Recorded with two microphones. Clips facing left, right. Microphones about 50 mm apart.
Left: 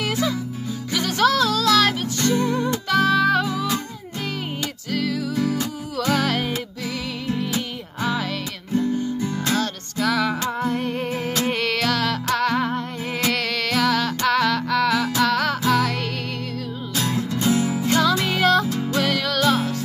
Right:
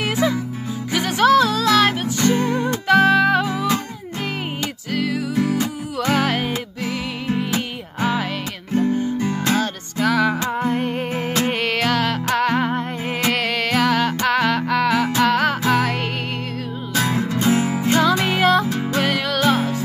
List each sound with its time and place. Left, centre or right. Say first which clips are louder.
0.0 s music: right 3 dB; right
2.3 s music: right 1 dB; right
3.4 s music: right 3 dB; right
4.8 s music: right 2 dB; right
6.8 s music: right 3 dB; right
8.7 s guitar: right 3 dB; right
9.2 s music: right 3 dB; right
9.9 s music: right 3 dB; centre
16.9 s music: right 4 dB; right; by 18.7 s centre
18.7 s music: right 2 dB; right
19.0 s music: right 2 dB; right